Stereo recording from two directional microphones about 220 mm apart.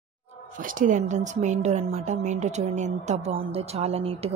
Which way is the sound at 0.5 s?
35° right (ahead or behind).